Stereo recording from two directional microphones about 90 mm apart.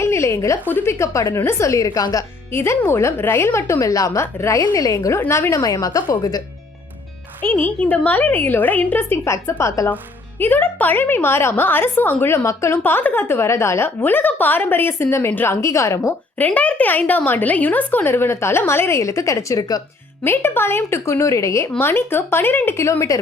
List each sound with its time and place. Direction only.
0.0 s a sound: 30° left (ahead or behind)
0.7 s a woman's voice: 30° left (ahead or behind)
2.5 s a woman's voice: 30° left (ahead or behind)
7.4 s speech: 20° left (ahead or behind)
9.9 s speech: 20° left (ahead or behind)
15.6 s a woman's voice: 35° left (ahead or behind)
16.4 s speech: 15° left (ahead or behind); by 19.8 s 45° left (ahead or behind)
20.2 s speech: 25° left (ahead or behind)